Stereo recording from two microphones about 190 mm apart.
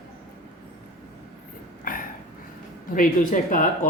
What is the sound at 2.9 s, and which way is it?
Speech, 45° left (ahead or behind).